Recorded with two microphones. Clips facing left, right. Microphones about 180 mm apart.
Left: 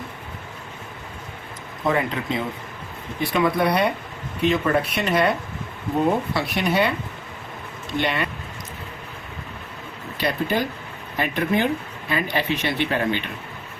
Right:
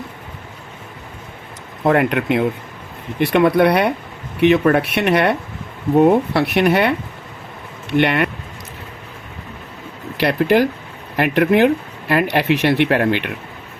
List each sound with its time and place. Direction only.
1.8 s speech: 70° right (ahead or behind)
10.2 s speech: 75° right (ahead or behind)